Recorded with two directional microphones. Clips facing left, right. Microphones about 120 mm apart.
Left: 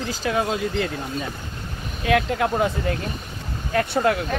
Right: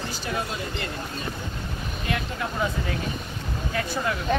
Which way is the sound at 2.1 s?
90° left.